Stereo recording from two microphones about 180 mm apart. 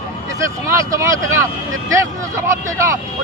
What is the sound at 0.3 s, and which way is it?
Speech, 15° right (ahead or behind).